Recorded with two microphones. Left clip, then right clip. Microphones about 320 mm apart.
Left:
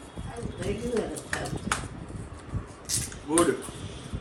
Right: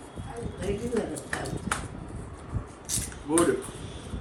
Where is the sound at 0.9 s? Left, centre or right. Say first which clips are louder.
Even; centre.